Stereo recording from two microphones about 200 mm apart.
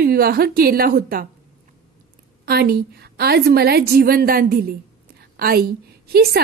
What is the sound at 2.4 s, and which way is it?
A woman's voice, 50° right (ahead or behind).